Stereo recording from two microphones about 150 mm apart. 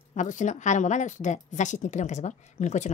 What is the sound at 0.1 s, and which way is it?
Speech, 55° left (ahead or behind).